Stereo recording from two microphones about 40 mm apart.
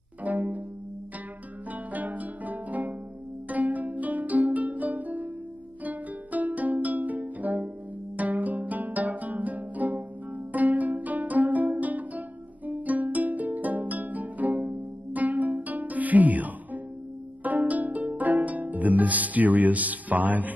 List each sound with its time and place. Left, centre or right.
0.2 s pizzicato: right
1.7 s music: right
3.4 s pizzicato: right
5.9 s music: right
17.4 s harp: right